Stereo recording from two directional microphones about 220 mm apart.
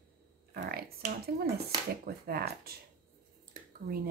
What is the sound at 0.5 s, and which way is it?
Speech, 45° right (ahead or behind).